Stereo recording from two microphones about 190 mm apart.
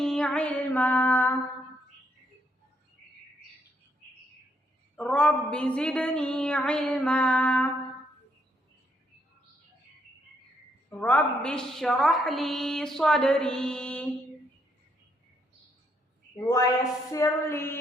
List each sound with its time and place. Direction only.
0.0 s music: 5° left (ahead or behind)
4.9 s a woman's voice: 5° left (ahead or behind)
10.8 s a woman's voice: 10° left (ahead or behind)
16.4 s a woman's voice: 20° left (ahead or behind)
17.1 s music: 15° left (ahead or behind)